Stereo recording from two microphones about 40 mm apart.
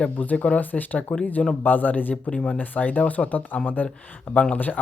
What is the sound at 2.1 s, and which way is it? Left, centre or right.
Speech, left.